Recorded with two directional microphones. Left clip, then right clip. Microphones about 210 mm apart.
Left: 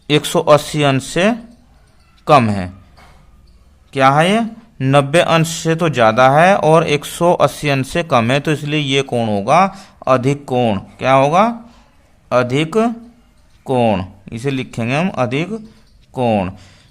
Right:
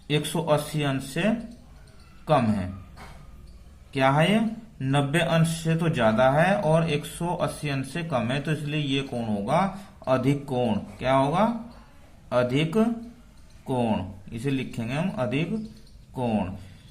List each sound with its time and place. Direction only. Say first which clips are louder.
0.1 s speech: left 13 dB; 45° left (ahead or behind)
3.9 s a man's voice: left 10 dB; 35° left (ahead or behind)